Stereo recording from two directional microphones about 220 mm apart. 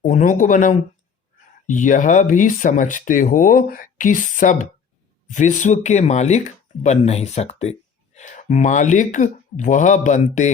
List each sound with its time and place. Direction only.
0.0 s speech: 35° left (ahead or behind)